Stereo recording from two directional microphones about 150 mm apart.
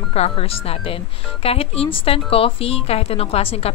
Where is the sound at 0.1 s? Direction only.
40° left (ahead or behind).